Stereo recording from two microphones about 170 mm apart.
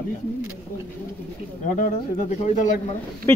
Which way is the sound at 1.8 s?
45° left (ahead or behind).